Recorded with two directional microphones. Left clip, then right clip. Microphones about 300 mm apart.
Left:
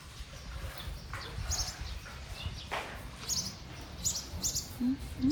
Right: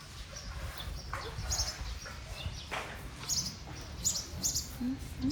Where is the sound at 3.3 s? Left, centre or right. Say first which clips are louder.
Right 1 dB; centre.